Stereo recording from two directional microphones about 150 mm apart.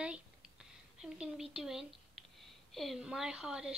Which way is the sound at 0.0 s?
5° right (ahead or behind).